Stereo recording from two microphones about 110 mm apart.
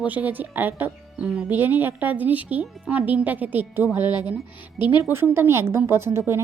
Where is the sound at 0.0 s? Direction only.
15° right (ahead or behind).